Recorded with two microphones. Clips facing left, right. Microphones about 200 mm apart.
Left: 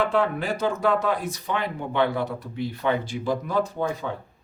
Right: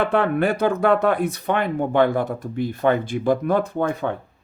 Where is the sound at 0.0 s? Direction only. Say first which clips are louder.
Right 4 dB; 60° right (ahead or behind).